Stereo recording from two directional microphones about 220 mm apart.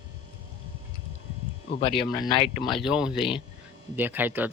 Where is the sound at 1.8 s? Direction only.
25° left (ahead or behind).